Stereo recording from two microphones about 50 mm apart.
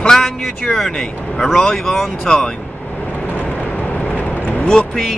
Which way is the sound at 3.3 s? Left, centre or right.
Left.